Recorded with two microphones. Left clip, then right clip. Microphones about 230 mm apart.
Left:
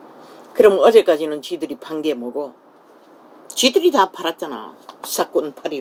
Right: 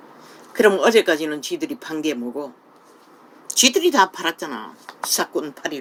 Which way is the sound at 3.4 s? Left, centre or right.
Right.